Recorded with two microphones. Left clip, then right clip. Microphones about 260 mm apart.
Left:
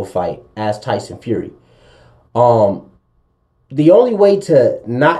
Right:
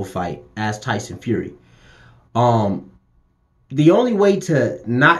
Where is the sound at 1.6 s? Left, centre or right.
Right.